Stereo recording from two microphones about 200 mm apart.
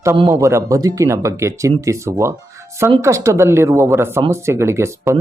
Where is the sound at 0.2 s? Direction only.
20° right (ahead or behind).